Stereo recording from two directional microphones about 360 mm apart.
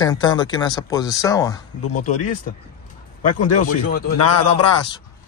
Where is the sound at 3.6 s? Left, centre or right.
Left.